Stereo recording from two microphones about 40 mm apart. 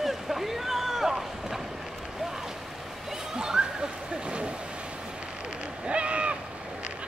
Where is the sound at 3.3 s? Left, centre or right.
Centre.